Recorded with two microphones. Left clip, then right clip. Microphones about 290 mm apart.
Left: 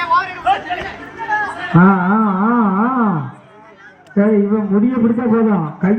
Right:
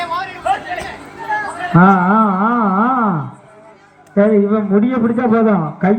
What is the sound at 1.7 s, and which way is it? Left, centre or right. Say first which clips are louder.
Carnatic music: right 3 dB; centre.